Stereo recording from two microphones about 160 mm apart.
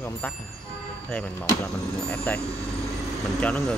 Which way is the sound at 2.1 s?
10° left (ahead or behind).